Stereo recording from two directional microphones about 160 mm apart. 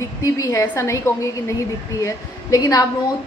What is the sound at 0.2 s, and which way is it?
A woman's voice, 20° left (ahead or behind).